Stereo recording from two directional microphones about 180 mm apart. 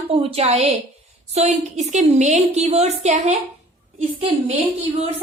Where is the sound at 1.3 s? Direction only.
40° right (ahead or behind).